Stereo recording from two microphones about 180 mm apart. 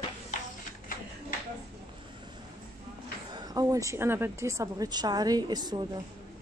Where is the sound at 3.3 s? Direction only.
20° right (ahead or behind).